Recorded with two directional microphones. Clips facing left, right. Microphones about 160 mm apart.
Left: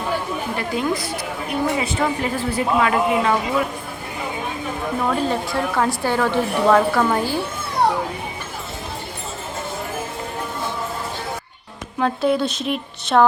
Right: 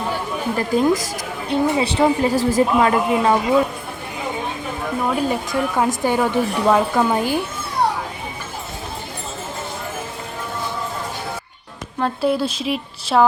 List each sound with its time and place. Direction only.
0.5 s a woman's voice: 40° right (ahead or behind)
5.0 s a woman's voice: 10° right (ahead or behind)
11.9 s a woman's voice: centre (ahead or behind)